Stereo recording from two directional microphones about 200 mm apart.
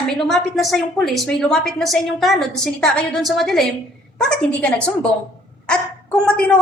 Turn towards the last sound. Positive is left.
turn(degrees=5)  # may be behind; listen again after turning